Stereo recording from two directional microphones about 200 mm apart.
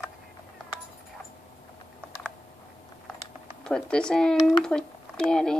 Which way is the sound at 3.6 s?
5° left (ahead or behind).